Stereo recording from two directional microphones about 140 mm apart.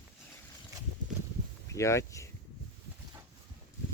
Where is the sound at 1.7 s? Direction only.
20° left (ahead or behind).